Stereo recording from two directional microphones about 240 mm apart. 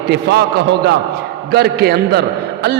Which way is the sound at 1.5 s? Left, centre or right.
Right.